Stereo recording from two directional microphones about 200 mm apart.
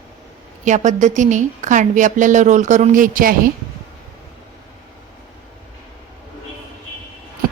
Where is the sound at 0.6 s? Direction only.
35° right (ahead or behind).